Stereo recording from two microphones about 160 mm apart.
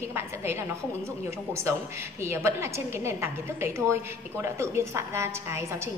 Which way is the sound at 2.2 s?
15° right (ahead or behind).